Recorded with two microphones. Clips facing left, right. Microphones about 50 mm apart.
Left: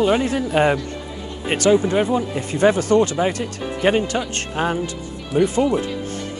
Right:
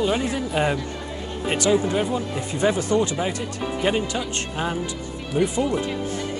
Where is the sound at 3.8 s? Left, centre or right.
Left.